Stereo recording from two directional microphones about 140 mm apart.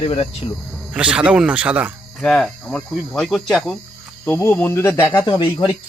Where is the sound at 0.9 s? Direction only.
5° right (ahead or behind).